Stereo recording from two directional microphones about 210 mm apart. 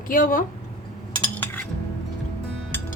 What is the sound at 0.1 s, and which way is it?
Speech, 40° left (ahead or behind).